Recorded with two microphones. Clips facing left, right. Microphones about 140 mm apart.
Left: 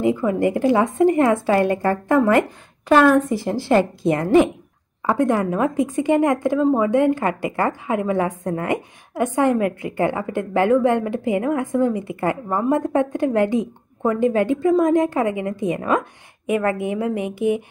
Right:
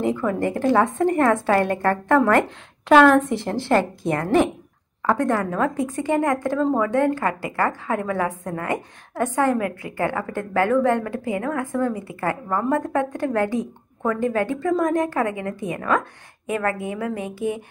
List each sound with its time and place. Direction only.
0.0 s a woman's voice: 10° left (ahead or behind)